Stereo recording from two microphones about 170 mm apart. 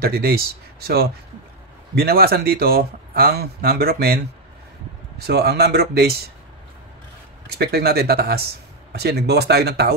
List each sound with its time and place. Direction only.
0.0 s speech: 65° right (ahead or behind)
5.2 s speech: 70° right (ahead or behind)
7.5 s speech: 65° right (ahead or behind)